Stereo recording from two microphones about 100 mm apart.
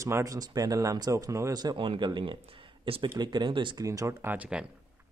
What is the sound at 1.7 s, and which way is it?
Speech, 60° right (ahead or behind).